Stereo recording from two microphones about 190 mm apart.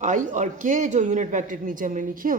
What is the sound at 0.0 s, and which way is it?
A woman's voice, 40° right (ahead or behind).